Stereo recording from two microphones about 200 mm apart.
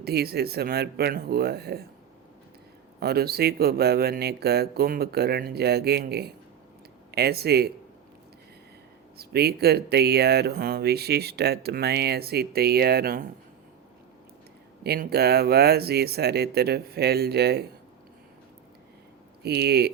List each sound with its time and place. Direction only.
0.0 s speech: 50° right (ahead or behind)
3.0 s speech: 50° right (ahead or behind)
9.1 s speech: 50° right (ahead or behind)
14.8 s speech: 55° right (ahead or behind)
19.4 s speech: 55° right (ahead or behind)